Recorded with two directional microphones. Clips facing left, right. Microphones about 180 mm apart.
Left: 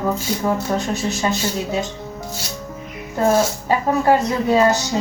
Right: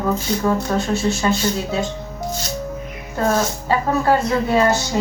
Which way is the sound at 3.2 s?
20° left (ahead or behind).